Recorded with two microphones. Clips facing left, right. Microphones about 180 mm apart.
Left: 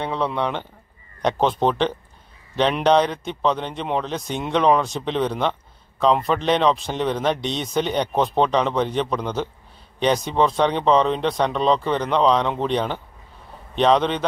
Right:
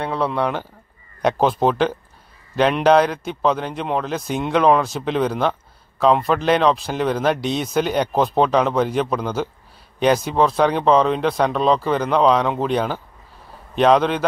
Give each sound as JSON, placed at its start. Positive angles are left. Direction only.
{"t": 0.0, "sound": "a man's voice", "side_deg": -5}